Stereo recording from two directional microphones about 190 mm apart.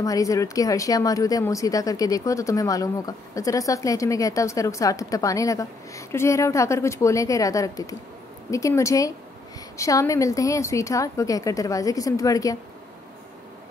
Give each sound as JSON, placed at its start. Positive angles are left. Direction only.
{"t": 0.0, "sound": "a woman's voice", "side_deg": 15}